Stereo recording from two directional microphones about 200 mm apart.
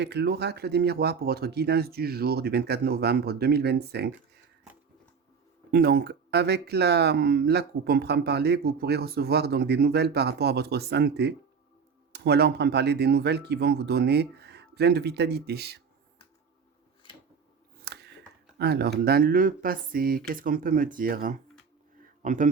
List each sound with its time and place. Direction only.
0.0 s speech: 55° right (ahead or behind)
5.7 s speech: 50° right (ahead or behind)
17.9 s a sound: 55° right (ahead or behind)
18.6 s speech: 55° right (ahead or behind)